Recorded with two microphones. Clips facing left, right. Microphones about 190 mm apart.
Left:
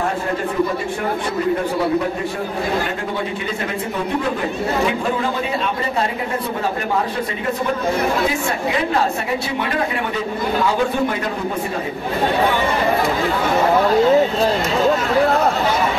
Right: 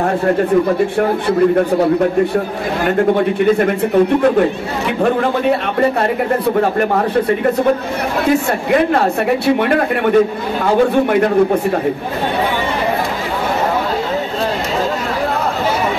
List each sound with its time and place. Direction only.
3.2 s a man's voice: 55° right (ahead or behind)
5.0 s a man's voice: 60° right (ahead or behind)
8.3 s a man's voice: 60° right (ahead or behind)